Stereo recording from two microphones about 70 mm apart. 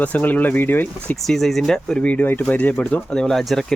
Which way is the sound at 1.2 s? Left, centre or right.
Centre.